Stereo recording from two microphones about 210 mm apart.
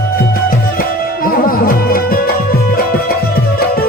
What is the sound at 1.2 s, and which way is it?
Music, 45° left (ahead or behind).